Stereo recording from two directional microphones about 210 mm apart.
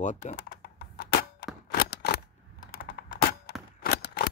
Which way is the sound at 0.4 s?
50° left (ahead or behind).